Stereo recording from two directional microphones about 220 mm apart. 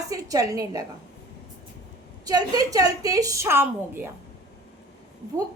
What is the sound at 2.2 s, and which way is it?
A woman's voice, 15° right (ahead or behind).